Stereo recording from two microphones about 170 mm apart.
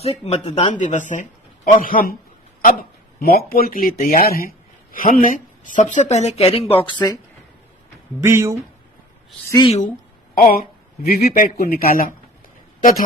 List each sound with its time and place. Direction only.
0.0 s speech: 40° left (ahead or behind)
0.9 s speech: 45° left (ahead or behind); by 7.0 s 30° left (ahead or behind)
8.2 s speech: 15° right (ahead or behind)
10.3 s a sound: 60° left (ahead or behind)
11.2 s a man's voice: 65° left (ahead or behind)